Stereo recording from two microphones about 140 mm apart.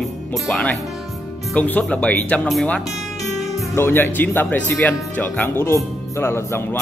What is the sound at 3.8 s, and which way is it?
Speech, 15° left (ahead or behind).